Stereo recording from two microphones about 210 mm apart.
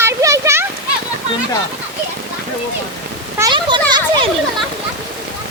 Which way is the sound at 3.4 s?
20° right (ahead or behind).